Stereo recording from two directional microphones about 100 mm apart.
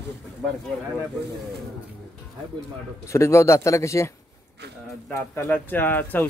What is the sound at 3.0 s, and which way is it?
Speech, 30° left (ahead or behind).